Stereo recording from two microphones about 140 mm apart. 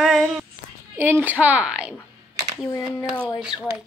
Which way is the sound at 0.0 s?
Centre (ahead or behind).